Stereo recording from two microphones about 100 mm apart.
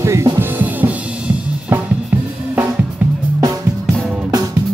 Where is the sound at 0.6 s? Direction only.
15° right (ahead or behind).